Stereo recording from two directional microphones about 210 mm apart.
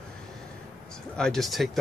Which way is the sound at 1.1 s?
5° left (ahead or behind).